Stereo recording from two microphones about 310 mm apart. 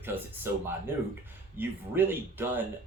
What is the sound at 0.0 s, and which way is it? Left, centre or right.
Speech, centre.